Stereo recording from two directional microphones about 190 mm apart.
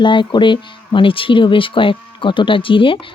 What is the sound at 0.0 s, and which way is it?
Speech, 25° left (ahead or behind).